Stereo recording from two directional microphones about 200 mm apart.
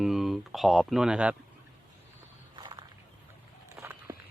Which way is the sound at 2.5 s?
20° right (ahead or behind).